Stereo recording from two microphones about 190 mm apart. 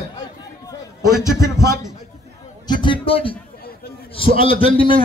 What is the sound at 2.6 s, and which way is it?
Speech, 25° left (ahead or behind).